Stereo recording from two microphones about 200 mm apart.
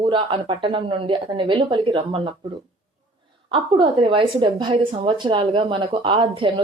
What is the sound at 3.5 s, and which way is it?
Speech, 25° right (ahead or behind).